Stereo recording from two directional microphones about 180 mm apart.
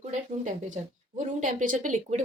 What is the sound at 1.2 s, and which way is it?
Speech, 45° right (ahead or behind).